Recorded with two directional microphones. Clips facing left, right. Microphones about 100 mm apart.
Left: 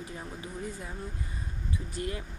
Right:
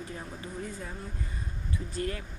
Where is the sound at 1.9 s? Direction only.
20° left (ahead or behind).